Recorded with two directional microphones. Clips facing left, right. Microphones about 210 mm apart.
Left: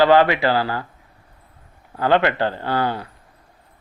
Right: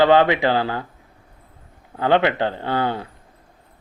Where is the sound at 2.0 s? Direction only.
15° right (ahead or behind).